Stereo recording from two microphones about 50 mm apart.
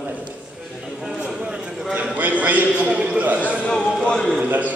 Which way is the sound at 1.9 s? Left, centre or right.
Right.